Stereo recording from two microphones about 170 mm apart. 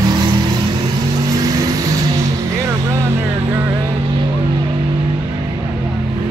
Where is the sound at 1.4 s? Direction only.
20° right (ahead or behind).